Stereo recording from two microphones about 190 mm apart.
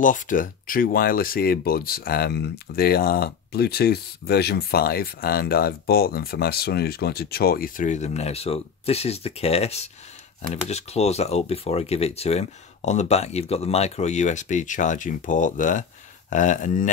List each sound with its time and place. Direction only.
0.0 s speech: 45° left (ahead or behind)